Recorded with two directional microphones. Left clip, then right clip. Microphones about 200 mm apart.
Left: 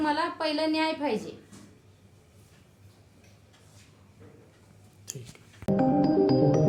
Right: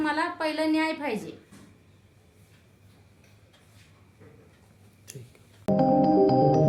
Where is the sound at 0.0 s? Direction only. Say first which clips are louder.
Even; 15° right (ahead or behind).